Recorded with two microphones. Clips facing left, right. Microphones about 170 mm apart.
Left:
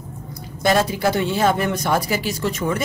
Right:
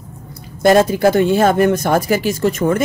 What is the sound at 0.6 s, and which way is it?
Speech, 50° right (ahead or behind).